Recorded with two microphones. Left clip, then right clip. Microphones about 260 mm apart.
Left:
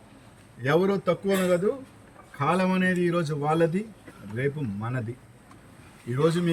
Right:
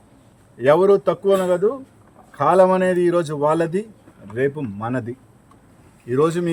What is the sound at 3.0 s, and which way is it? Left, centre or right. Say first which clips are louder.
Speech: right 8 dB; right.